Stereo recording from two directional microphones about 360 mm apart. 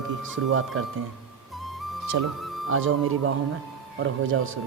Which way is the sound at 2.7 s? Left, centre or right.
Right.